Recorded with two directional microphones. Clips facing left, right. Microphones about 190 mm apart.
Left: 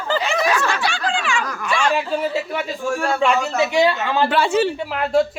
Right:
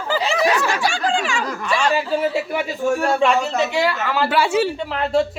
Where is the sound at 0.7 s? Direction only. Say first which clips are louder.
Right 2 dB; 40° right (ahead or behind).